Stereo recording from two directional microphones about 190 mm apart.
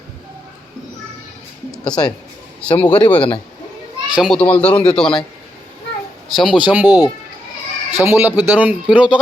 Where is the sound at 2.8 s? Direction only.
10° left (ahead or behind).